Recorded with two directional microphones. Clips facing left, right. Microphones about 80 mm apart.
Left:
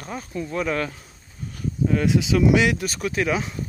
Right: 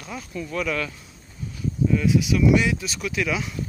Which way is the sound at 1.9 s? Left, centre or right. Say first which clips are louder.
Even; left.